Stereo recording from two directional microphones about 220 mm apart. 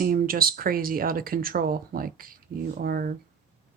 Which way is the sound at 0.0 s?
40° right (ahead or behind).